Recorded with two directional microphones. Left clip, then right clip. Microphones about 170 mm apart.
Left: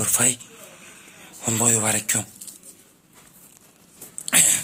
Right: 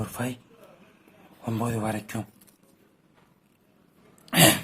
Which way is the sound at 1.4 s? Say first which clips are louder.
Left 7 dB; 10° left (ahead or behind).